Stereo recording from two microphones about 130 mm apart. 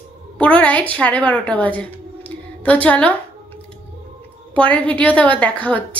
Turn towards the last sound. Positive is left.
turn(degrees=10)  # may be behind; listen again after turning